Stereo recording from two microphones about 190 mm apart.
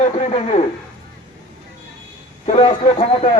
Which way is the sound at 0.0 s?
35° left (ahead or behind).